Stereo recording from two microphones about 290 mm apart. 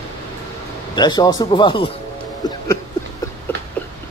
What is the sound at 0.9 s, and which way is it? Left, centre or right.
Speech, centre.